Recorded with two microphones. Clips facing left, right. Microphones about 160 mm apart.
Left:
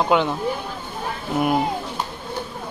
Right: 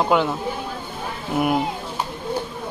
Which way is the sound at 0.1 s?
5° right (ahead or behind).